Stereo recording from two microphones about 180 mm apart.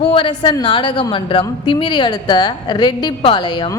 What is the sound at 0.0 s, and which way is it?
A woman's voice, 30° left (ahead or behind).